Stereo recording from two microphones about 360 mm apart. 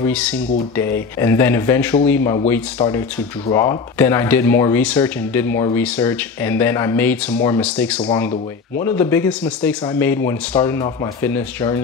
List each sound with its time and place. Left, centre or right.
0.0 s speech: centre